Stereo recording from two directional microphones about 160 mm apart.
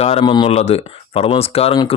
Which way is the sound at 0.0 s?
35° left (ahead or behind).